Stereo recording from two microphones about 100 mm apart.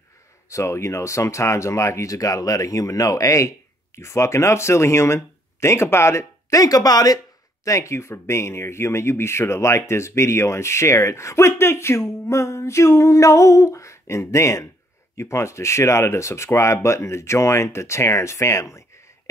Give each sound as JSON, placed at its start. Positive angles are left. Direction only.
{"t": 0.5, "sound": "speech", "side_deg": 30}